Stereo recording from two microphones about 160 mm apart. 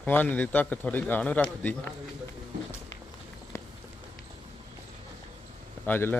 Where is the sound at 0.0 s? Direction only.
10° left (ahead or behind).